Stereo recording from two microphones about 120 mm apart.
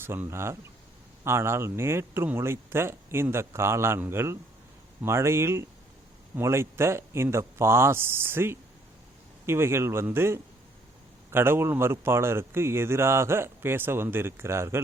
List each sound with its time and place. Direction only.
0.0 s speech: 20° right (ahead or behind)